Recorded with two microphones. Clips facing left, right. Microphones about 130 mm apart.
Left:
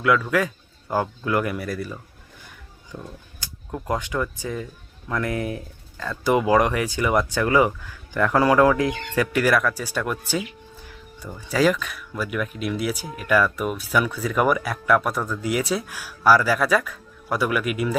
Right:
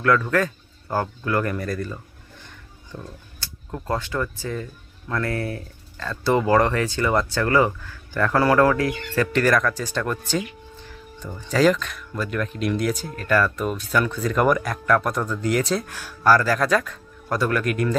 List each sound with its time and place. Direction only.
0.0 s speech: 10° left (ahead or behind)